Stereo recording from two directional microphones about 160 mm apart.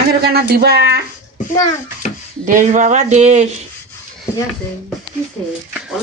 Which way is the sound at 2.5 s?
55° right (ahead or behind).